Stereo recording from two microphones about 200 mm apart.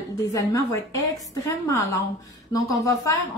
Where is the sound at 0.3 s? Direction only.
15° left (ahead or behind).